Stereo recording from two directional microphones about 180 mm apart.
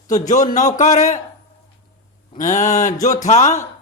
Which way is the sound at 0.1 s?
45° left (ahead or behind).